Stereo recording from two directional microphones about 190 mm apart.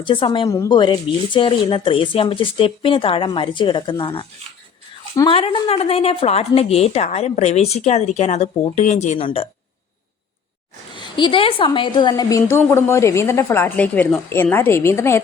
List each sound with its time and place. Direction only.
0.0 s a woman's voice: 25° left (ahead or behind)
10.9 s a woman's voice: 25° left (ahead or behind)